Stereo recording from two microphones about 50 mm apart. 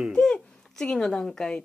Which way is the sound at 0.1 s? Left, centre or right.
Centre.